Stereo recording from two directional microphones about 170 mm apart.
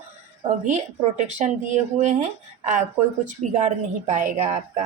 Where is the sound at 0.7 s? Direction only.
45° right (ahead or behind).